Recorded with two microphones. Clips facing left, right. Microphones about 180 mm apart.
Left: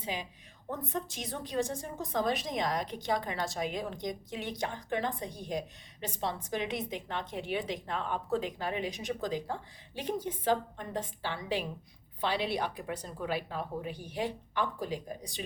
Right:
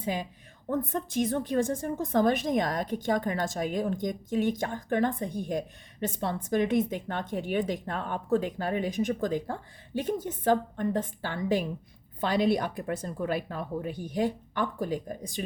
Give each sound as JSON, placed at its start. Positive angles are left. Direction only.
{"t": 0.0, "sound": "a woman's voice", "side_deg": -50}